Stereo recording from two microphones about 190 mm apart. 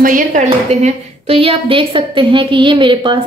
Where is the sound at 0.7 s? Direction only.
35° right (ahead or behind).